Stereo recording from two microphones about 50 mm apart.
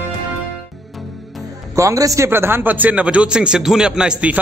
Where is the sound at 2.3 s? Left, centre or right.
Right; by 4.2 s centre.